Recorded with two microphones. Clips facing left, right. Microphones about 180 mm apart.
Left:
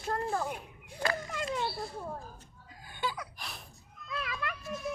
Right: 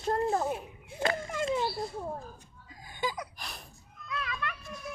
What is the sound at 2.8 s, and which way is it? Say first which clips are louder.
Gasp: right 2 dB; 15° right (ahead or behind).